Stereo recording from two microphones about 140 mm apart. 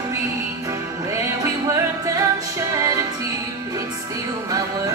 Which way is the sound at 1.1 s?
20° right (ahead or behind).